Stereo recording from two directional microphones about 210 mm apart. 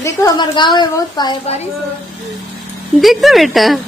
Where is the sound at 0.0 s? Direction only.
15° left (ahead or behind).